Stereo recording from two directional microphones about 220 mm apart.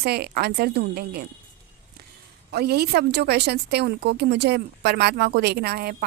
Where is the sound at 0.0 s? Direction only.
45° right (ahead or behind).